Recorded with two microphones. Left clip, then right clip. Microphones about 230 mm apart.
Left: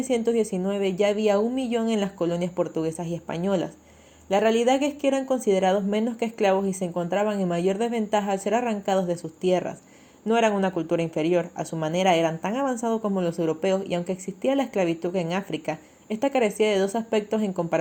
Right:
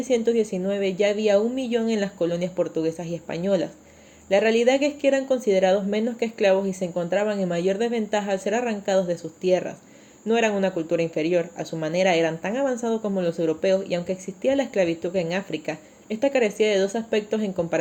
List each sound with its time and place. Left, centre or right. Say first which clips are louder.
0.1 s speech: right 2 dB; left